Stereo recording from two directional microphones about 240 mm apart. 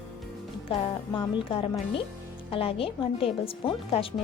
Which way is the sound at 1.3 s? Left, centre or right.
Left.